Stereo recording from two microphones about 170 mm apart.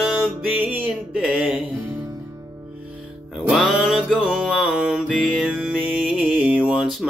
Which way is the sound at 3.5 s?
5° right (ahead or behind).